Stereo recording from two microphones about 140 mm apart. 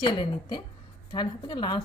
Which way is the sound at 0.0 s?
35° left (ahead or behind).